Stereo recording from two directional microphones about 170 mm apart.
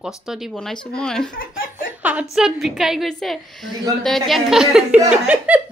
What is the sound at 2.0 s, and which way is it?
A woman's voice, 10° right (ahead or behind).